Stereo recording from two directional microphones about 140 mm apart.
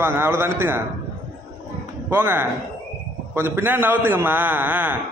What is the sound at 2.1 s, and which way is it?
A man's voice, 15° right (ahead or behind).